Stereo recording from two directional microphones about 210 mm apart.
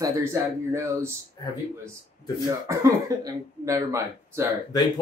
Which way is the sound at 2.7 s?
15° right (ahead or behind).